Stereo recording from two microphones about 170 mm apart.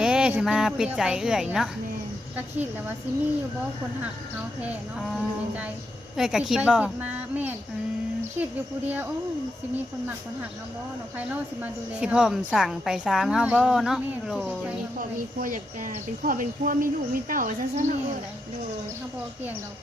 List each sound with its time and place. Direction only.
0.0 s a woman's voice: 5° right (ahead or behind)
4.6 s a woman's voice: 5° right (ahead or behind)
11.6 s a woman's voice: 5° right (ahead or behind)
14.9 s speech: 55° right (ahead or behind)